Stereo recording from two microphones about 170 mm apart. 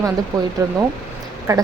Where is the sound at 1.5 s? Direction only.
20° right (ahead or behind).